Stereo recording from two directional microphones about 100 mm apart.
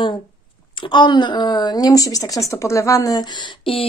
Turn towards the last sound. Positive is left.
turn(degrees=65)  # may be behind; listen again after turning